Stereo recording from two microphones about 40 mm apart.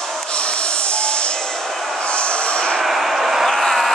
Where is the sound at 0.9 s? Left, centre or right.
Left.